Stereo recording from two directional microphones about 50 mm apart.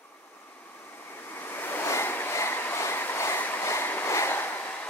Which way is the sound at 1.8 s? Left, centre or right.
Left.